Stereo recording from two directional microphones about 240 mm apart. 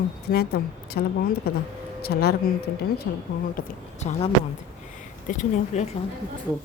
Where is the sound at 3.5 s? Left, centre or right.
Left.